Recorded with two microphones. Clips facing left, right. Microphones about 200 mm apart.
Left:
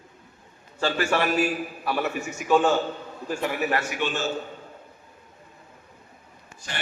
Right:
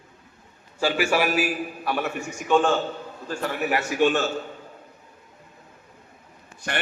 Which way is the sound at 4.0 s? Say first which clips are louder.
Right 8 dB; 50° right (ahead or behind).